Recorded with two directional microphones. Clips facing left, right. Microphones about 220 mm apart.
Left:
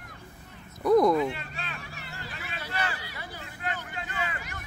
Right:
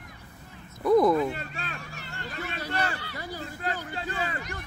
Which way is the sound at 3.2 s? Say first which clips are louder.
Right 5 dB; 40° right (ahead or behind).